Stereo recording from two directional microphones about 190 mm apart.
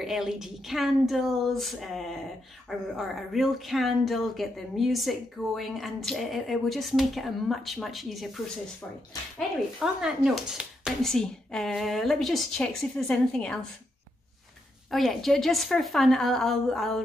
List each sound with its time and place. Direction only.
0.0 s a woman's voice: centre (ahead or behind)
9.8 s a woman's voice: 5° right (ahead or behind)
14.9 s a woman's voice: centre (ahead or behind)